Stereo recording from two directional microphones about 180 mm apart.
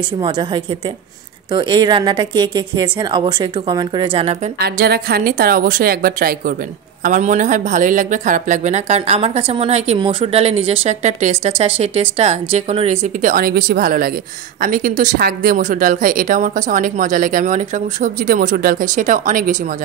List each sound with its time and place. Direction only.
1.5 s speech: 25° right (ahead or behind)
4.6 s a woman's voice: 60° right (ahead or behind); by 13.3 s 35° right (ahead or behind)
13.3 s speech: 55° right (ahead or behind)